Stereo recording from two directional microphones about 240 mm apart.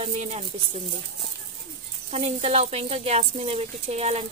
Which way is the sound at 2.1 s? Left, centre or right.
Right.